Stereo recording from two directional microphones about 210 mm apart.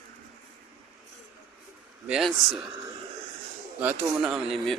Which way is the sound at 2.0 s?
Centre (ahead or behind).